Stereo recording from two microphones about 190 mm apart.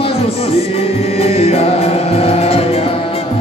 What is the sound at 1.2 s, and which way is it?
Music, 35° left (ahead or behind).